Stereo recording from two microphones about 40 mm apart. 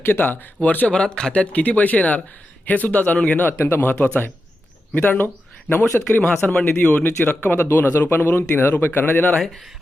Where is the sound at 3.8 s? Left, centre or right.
Left.